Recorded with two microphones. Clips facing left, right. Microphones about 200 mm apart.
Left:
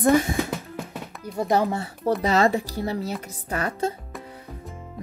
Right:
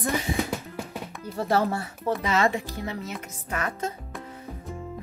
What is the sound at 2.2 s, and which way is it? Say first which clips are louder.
A woman's voice: left 4 dB; 35° left (ahead or behind).